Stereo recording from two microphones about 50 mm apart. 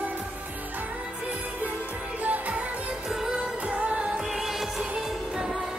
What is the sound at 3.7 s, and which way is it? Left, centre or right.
Music, right.